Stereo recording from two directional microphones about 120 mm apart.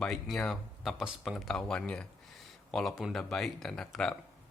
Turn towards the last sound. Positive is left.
turn(degrees=5)  # may be behind; listen again after turning